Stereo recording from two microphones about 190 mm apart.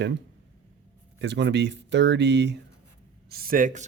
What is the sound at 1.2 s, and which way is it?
A man's voice, 70° right (ahead or behind).